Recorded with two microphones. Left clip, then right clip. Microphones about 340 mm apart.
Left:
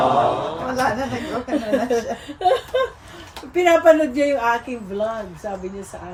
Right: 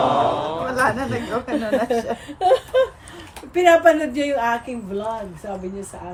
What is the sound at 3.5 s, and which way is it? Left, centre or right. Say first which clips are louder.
Speech: even; centre.